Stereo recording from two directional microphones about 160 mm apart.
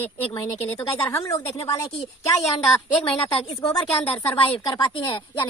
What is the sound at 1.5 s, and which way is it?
Speech, 20° left (ahead or behind).